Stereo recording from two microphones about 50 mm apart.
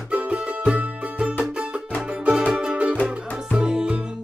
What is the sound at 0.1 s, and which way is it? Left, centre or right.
Music, right.